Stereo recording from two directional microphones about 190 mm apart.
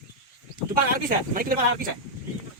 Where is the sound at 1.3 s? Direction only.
50° right (ahead or behind).